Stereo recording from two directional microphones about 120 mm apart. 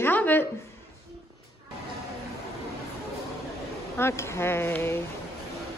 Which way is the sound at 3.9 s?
20° left (ahead or behind).